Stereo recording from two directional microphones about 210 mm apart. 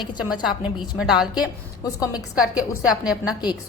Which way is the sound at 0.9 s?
5° right (ahead or behind).